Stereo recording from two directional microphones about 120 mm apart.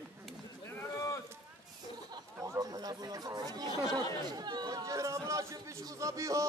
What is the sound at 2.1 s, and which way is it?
Speech, 30° right (ahead or behind).